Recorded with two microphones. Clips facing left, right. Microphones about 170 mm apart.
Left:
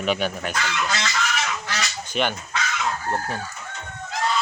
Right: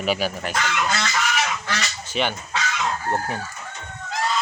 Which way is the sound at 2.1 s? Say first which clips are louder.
Even; 5° right (ahead or behind).